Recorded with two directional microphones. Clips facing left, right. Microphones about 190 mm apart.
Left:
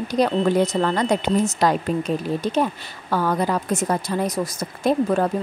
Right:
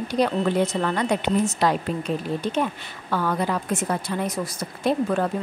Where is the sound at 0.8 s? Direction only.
40° left (ahead or behind).